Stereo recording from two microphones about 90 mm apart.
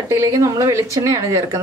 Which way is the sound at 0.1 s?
35° right (ahead or behind).